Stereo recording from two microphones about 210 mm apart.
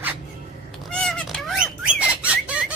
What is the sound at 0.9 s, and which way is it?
Cat, centre (ahead or behind).